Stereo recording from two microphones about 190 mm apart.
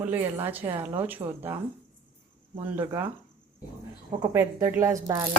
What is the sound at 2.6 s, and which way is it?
Speech, 10° right (ahead or behind).